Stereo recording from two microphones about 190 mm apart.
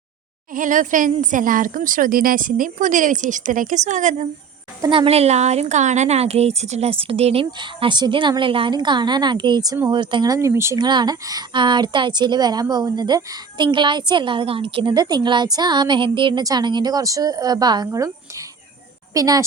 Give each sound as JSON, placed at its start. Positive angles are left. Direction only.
{"t": 0.5, "sound": "a woman's voice", "side_deg": -45}
{"t": 4.8, "sound": "a woman's voice", "side_deg": -25}